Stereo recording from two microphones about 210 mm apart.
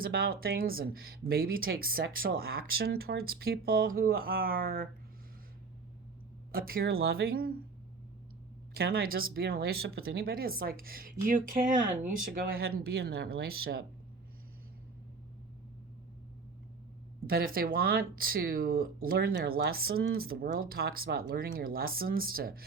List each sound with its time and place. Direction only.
0.0 s speech: 45° right (ahead or behind)
6.5 s speech: 45° right (ahead or behind)
8.7 s speech: 45° right (ahead or behind)
17.2 s speech: 45° right (ahead or behind)